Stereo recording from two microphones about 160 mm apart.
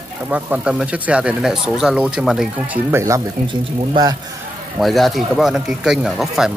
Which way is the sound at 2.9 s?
15° right (ahead or behind).